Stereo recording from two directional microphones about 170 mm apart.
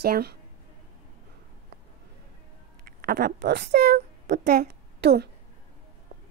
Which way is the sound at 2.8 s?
65° right (ahead or behind).